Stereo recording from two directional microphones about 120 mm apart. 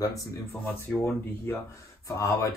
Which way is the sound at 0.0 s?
25° left (ahead or behind).